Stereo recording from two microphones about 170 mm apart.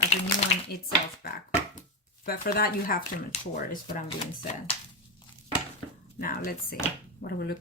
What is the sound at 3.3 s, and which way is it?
Speech, 40° left (ahead or behind).